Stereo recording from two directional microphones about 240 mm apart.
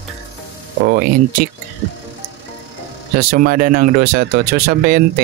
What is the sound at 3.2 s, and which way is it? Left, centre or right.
Speech, right.